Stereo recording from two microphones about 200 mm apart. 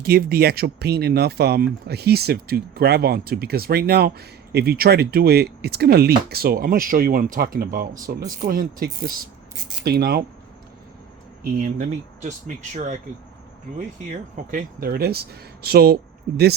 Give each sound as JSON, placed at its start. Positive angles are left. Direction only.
{"t": 0.0, "sound": "speech", "side_deg": -50}
{"t": 11.4, "sound": "speech", "side_deg": -45}
{"t": 12.7, "sound": "speech", "side_deg": -40}
{"t": 14.3, "sound": "speech", "side_deg": -45}